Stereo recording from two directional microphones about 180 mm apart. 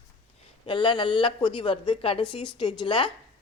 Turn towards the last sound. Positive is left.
turn(degrees=25)  # may be behind; listen again after turning